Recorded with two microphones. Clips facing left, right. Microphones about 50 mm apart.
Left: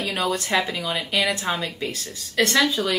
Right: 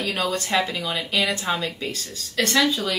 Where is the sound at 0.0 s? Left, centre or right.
Left.